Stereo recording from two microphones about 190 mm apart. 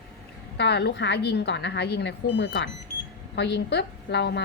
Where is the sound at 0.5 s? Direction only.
60° left (ahead or behind).